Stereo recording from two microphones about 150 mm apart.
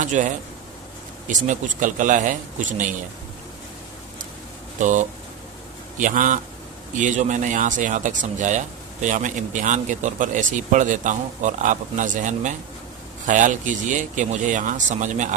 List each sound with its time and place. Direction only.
0.0 s speech: 55° right (ahead or behind)
1.5 s speech: 60° right (ahead or behind)
4.8 s speech: 55° right (ahead or behind)